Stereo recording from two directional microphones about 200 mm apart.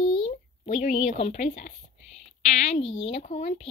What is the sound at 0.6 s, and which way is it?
Speech, 35° left (ahead or behind).